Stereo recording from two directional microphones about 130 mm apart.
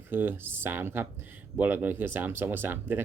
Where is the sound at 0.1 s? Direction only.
15° right (ahead or behind).